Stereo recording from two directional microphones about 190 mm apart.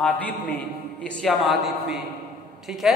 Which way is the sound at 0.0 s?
5° left (ahead or behind).